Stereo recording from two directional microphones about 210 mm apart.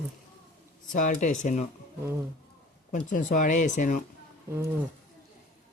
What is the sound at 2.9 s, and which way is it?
Speech, 35° left (ahead or behind).